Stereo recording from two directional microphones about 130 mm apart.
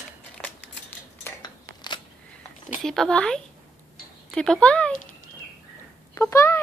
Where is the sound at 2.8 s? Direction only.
5° left (ahead or behind).